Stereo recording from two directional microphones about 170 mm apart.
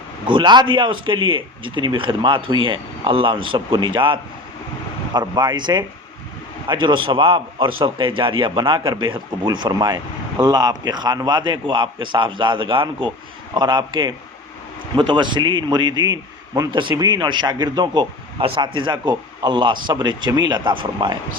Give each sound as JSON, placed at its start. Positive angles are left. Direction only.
{"t": 0.3, "sound": "speech", "side_deg": -25}